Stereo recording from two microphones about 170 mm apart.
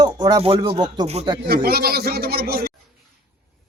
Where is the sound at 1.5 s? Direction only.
65° right (ahead or behind).